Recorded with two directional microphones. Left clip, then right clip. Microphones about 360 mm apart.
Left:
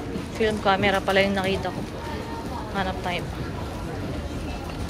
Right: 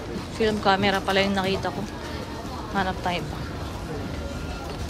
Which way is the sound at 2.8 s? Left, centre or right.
Centre.